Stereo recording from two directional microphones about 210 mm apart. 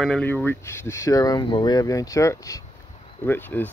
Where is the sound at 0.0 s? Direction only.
5° left (ahead or behind).